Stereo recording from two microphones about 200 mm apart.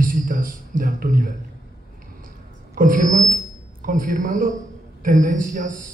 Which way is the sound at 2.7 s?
40° right (ahead or behind).